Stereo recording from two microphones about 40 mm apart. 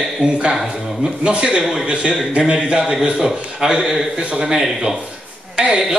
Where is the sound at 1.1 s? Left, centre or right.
Right.